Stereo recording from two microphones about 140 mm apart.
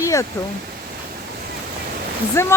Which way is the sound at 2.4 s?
20° left (ahead or behind).